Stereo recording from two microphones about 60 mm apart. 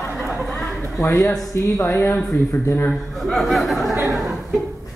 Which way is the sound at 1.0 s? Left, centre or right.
Left.